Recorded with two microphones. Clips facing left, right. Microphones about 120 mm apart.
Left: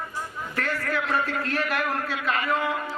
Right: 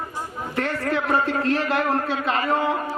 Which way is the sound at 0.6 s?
25° right (ahead or behind).